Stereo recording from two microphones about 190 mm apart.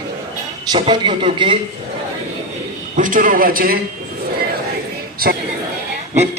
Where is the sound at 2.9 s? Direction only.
45° right (ahead or behind).